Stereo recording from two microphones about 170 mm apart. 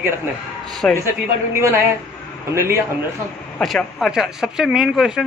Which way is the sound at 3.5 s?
Centre (ahead or behind).